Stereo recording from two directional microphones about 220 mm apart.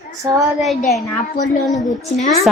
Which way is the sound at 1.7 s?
35° left (ahead or behind).